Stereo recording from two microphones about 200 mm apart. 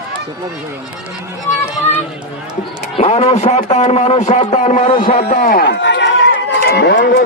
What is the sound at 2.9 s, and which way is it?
A man's voice, 30° left (ahead or behind).